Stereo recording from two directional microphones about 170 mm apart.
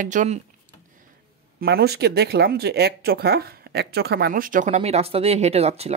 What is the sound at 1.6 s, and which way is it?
Speech, 65° right (ahead or behind).